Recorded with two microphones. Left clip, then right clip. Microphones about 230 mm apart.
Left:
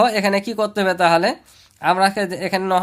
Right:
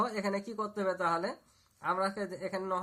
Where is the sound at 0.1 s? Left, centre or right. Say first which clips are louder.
Left 16 dB; left.